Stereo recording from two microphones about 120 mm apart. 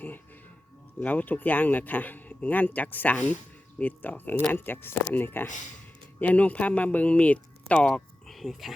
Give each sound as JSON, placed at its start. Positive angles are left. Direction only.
{"t": 0.9, "sound": "speech", "side_deg": 15}